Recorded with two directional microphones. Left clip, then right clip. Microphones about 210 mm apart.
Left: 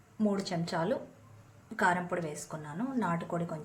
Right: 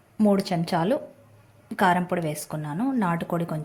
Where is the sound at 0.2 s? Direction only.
30° right (ahead or behind).